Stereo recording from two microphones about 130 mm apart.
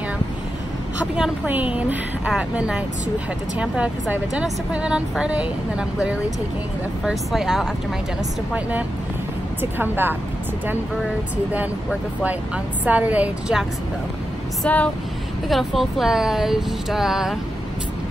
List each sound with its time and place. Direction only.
1.1 s a woman's voice: 10° right (ahead or behind)
9.6 s a woman's voice: 15° right (ahead or behind)
11.5 s a woman's voice: 10° right (ahead or behind)
14.6 s speech: 10° left (ahead or behind)
15.4 s speech: centre (ahead or behind)